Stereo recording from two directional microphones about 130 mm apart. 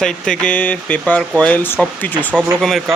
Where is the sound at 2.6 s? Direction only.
Centre (ahead or behind).